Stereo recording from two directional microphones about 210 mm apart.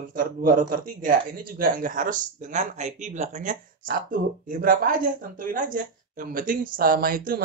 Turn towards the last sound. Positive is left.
turn(degrees=-40)  # may be behind; listen again after turning